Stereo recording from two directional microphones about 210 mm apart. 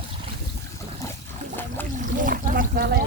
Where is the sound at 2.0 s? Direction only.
40° right (ahead or behind).